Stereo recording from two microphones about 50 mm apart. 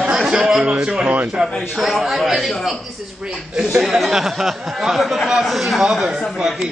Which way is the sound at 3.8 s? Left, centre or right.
Centre.